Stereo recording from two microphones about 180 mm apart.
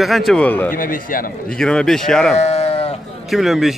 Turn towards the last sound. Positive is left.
turn(degrees=0)  # may be behind; listen again after turning